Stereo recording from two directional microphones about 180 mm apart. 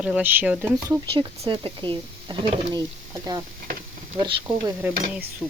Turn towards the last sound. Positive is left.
turn(degrees=-10)  # may be behind; listen again after turning